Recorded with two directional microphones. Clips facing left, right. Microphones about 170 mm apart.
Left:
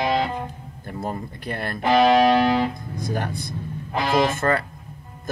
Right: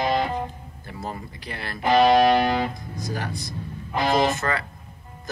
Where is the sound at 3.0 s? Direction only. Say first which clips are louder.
Left 3 dB; 55° left (ahead or behind).